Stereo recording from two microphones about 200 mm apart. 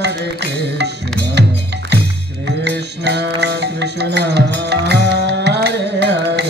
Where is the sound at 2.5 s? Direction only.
60° right (ahead or behind).